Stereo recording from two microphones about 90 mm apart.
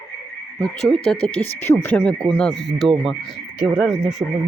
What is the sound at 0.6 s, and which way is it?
Speech, 10° left (ahead or behind).